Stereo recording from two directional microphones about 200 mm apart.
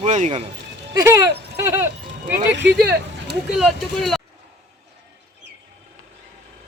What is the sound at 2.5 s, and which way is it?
Speech, 60° right (ahead or behind).